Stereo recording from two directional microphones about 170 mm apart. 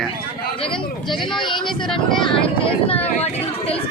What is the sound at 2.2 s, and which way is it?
Speech, 30° left (ahead or behind).